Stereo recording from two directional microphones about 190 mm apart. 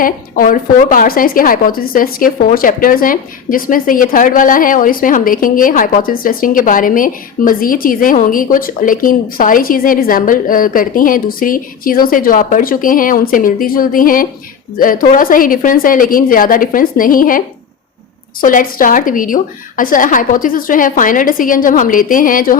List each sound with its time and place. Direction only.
0.0 s a woman's voice: 45° left (ahead or behind)